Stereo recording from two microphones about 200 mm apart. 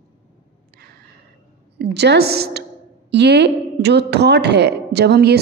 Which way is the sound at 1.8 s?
55° right (ahead or behind).